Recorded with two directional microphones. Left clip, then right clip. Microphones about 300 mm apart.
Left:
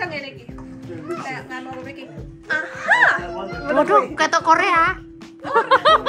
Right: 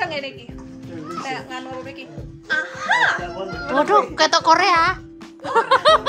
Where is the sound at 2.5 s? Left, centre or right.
Centre.